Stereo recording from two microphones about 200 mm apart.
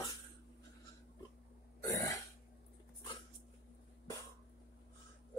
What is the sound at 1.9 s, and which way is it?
Throat clearing, 15° left (ahead or behind).